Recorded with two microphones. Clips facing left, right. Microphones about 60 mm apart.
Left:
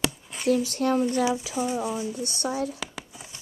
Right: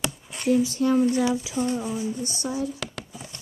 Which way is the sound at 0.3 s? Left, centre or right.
Centre.